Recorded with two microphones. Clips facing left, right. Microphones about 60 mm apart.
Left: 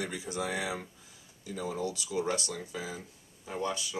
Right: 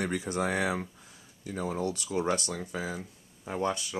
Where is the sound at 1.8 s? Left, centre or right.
Right.